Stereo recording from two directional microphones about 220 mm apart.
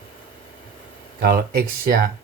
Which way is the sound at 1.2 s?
45° right (ahead or behind).